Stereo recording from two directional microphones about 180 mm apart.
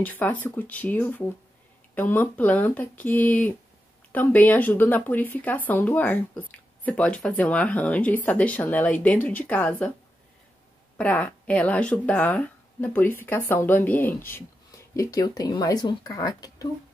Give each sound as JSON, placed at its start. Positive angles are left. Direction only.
{"t": 0.0, "sound": "speech", "side_deg": 10}
{"t": 11.0, "sound": "speech", "side_deg": 5}